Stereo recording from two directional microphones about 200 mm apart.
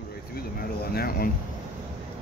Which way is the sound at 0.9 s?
50° left (ahead or behind).